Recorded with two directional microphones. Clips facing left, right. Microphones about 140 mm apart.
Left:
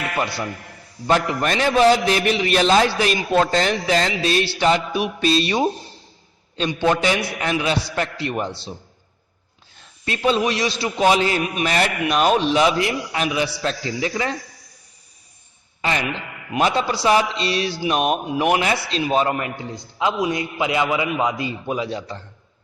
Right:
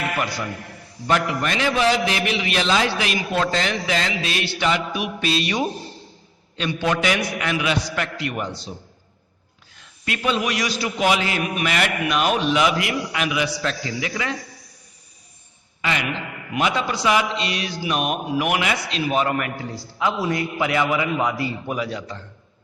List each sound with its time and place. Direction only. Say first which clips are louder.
0.2 s a man's voice: left 2 dB; 30° left (ahead or behind)
6.7 s a man's voice: left 2 dB; 20° left (ahead or behind)
9.7 s a man's voice: left 1 dB; 30° left (ahead or behind)
15.8 s a man's voice: left 2 dB; 35° left (ahead or behind)